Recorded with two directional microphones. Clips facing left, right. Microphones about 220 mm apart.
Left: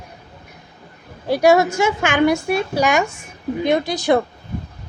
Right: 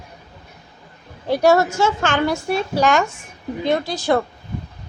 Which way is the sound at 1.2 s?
10° left (ahead or behind).